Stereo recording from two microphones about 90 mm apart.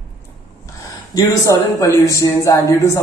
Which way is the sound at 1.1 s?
45° left (ahead or behind).